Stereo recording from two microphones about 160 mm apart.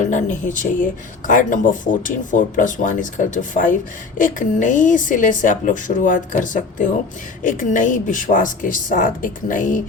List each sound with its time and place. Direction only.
0.0 s a woman's voice: 50° left (ahead or behind)